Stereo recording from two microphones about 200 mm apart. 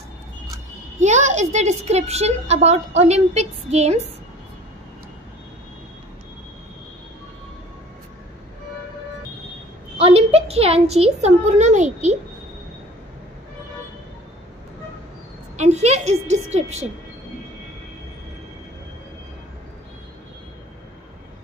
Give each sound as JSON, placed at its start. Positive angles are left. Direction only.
{"t": 0.9, "sound": "a woman's voice", "side_deg": -35}
{"t": 9.9, "sound": "a woman's voice", "side_deg": -30}
{"t": 15.5, "sound": "a woman's voice", "side_deg": -35}